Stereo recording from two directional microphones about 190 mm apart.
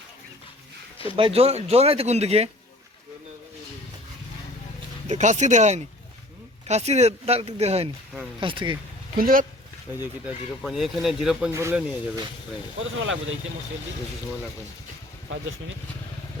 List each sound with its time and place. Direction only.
1.1 s speech: 30° right (ahead or behind)
5.0 s speech: 40° right (ahead or behind)
9.1 s speech: 50° right (ahead or behind)
9.9 s speech: 10° right (ahead or behind)
11.5 s speech: 15° right (ahead or behind)
12.8 s speech: 90° right